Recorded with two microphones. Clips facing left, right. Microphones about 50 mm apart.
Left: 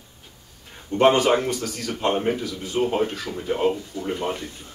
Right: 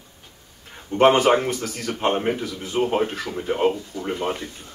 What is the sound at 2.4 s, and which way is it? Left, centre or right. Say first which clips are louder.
Speech: right 1 dB; right.